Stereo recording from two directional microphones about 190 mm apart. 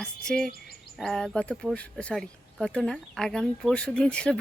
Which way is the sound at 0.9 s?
Centre (ahead or behind).